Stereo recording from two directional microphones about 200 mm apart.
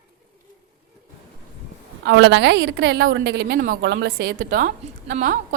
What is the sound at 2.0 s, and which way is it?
A woman's voice, 60° right (ahead or behind).